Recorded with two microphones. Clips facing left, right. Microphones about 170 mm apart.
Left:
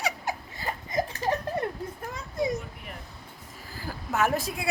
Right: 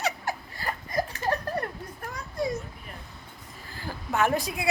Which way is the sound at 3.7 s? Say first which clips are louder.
Right 1 dB; 5° left (ahead or behind).